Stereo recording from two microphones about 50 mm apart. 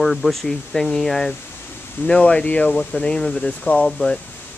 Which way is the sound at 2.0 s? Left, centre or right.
Centre.